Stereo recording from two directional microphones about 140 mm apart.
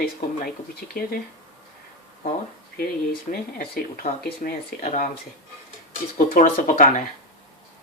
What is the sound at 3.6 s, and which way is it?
Speech, 90° left.